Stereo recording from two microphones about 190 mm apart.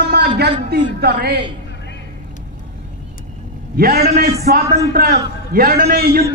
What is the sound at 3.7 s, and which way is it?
A man's voice, 55° right (ahead or behind).